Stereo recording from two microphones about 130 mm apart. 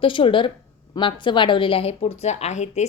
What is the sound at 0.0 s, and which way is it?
A woman's voice, 40° left (ahead or behind).